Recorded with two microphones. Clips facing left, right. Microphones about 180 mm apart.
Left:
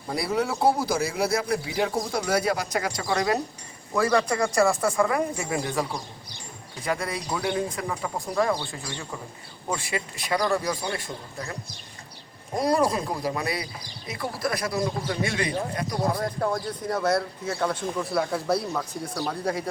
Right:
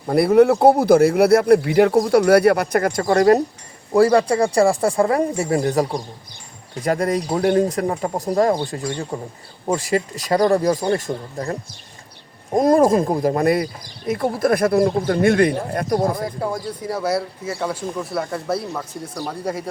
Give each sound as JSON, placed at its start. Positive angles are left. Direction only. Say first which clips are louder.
{"t": 0.1, "sound": "speech", "louder": "right 13 dB", "side_deg": -60}
{"t": 3.9, "sound": "speech", "louder": "right 8 dB", "side_deg": -35}
{"t": 8.7, "sound": "speech", "louder": "right 10 dB", "side_deg": -50}
{"t": 12.5, "sound": "speech", "louder": "right 9 dB", "side_deg": -45}
{"t": 16.2, "sound": "speech", "louder": "right 2 dB", "side_deg": -5}